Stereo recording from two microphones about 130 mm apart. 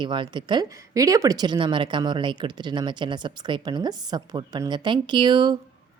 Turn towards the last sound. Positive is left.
turn(degrees=-35)  # may be behind; listen again after turning